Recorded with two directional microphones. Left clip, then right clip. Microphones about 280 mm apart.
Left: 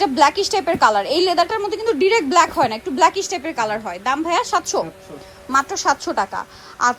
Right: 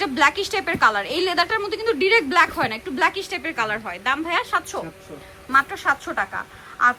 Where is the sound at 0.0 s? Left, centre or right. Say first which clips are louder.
Left 4 dB; centre.